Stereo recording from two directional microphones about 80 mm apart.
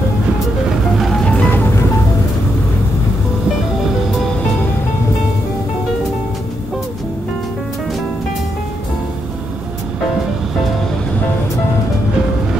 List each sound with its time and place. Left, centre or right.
0.9 s music: centre
1.3 s music: centre